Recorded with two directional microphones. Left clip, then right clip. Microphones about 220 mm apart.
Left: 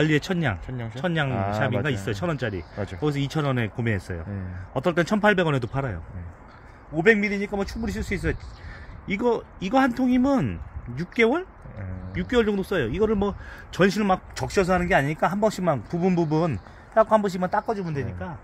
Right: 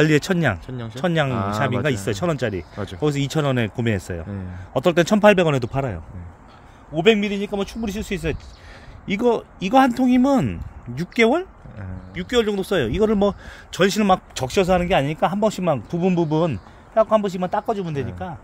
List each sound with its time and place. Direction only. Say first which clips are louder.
0.0 s speech: right 5 dB; 45° right (ahead or behind)
0.7 s speech: right 2 dB; 15° right (ahead or behind)
0.9 s a man's voice: right 5 dB; 45° right (ahead or behind)
7.0 s a man's voice: right 2 dB; 35° right (ahead or behind); by 18.3 s 50° right (ahead or behind)